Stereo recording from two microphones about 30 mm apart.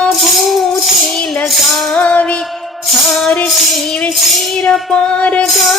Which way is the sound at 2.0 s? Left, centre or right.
Left.